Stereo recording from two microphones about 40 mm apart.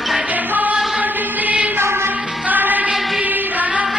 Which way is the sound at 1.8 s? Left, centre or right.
Right.